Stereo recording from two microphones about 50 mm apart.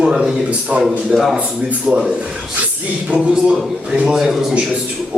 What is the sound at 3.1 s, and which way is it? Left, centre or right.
Speech, centre.